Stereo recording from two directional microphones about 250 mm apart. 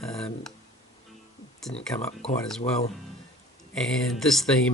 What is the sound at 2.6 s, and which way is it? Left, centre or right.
Speech, left.